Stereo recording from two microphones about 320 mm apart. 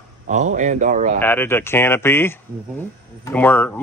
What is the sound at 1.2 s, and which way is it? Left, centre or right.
Speech, centre.